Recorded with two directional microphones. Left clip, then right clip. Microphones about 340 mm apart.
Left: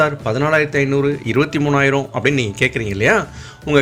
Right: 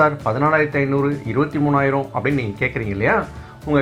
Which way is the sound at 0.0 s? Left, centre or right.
Left.